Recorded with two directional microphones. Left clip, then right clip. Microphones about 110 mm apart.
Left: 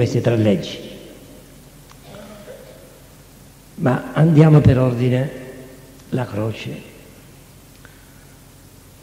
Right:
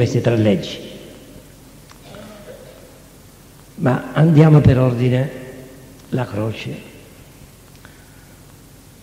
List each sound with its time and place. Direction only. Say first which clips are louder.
0.0 s a man's voice: right 1 dB; 40° right (ahead or behind)
2.0 s a sound: right 1 dB; 40° right (ahead or behind)
3.8 s a man's voice: right 1 dB; 45° right (ahead or behind)